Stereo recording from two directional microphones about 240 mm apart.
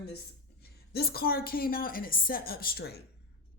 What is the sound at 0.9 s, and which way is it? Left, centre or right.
A woman's voice, left.